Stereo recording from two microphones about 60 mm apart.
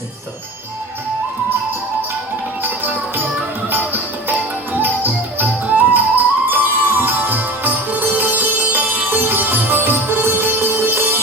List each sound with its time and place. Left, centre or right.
2.6 s music: right